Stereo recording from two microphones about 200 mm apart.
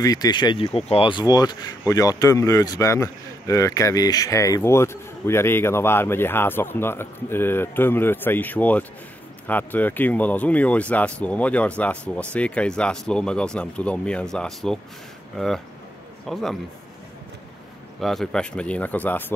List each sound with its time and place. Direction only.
0.0 s speech: 20° left (ahead or behind); by 16.5 s centre (ahead or behind)
18.0 s speech: centre (ahead or behind)